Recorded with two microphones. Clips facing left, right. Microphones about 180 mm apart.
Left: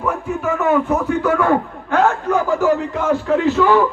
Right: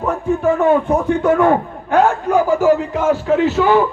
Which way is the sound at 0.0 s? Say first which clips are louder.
Right 4 dB; 35° right (ahead or behind).